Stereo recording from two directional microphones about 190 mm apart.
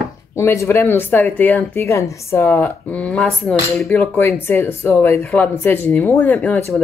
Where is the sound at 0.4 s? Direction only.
15° left (ahead or behind).